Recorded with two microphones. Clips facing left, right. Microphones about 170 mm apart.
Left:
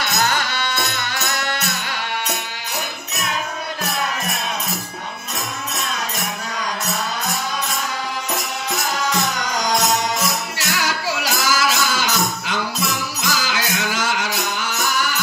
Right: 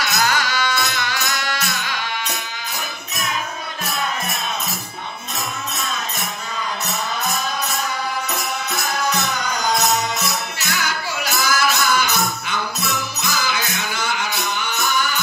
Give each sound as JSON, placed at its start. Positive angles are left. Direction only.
{"t": 0.1, "sound": "music", "side_deg": 25}
{"t": 9.4, "sound": "music", "side_deg": 90}